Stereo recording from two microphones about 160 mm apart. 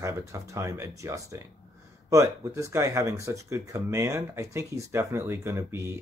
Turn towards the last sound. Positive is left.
turn(degrees=-20)  # may be behind; listen again after turning